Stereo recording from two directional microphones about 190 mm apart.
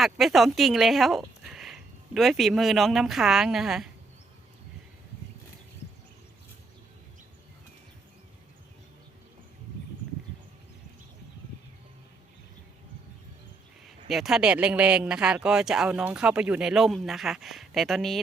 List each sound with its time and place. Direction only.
0.0 s speech: centre (ahead or behind)
14.1 s speech: centre (ahead or behind)